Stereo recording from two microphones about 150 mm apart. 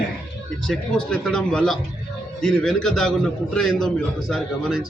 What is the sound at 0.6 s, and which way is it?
A man's voice, 5° left (ahead or behind).